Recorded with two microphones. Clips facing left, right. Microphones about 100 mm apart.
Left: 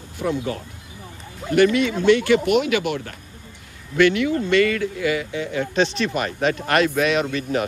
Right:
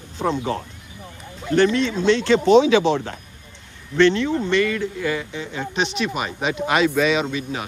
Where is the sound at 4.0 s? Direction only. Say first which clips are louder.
Right 1 dB; 20° right (ahead or behind); by 7.2 s centre (ahead or behind).